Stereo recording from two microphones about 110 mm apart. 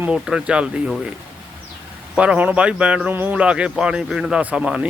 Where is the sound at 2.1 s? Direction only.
10° right (ahead or behind).